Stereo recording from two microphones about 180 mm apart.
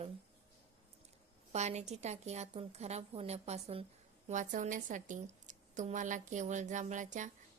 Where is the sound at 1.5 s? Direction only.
40° right (ahead or behind).